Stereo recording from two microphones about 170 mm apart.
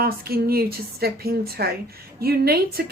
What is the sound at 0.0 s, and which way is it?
A woman's voice, 65° right (ahead or behind).